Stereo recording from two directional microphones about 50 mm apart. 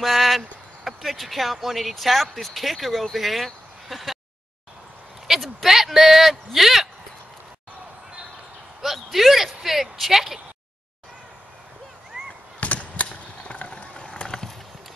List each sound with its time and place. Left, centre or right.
0.0 s speech: centre
5.3 s speech: centre
8.8 s speech: centre
12.5 s a sound: left
14.2 s clip-clop: centre